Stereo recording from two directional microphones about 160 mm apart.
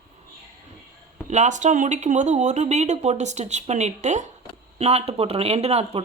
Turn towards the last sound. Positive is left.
turn(degrees=-40)  # may be behind; listen again after turning